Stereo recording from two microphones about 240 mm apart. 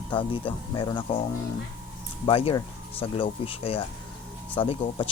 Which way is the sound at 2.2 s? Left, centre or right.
Left.